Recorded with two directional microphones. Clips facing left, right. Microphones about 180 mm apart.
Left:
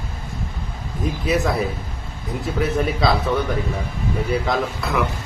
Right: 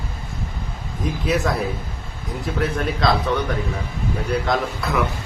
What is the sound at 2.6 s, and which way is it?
Speech, 5° left (ahead or behind).